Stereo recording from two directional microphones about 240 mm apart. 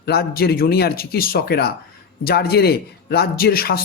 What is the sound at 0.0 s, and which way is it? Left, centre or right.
A man's voice, left.